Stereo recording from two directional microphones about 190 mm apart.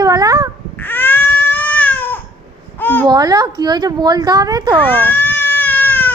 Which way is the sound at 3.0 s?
20° right (ahead or behind).